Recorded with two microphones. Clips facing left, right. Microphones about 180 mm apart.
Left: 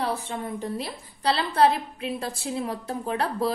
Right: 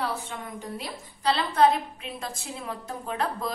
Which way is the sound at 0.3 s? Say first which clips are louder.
Left 6 dB; 35° left (ahead or behind).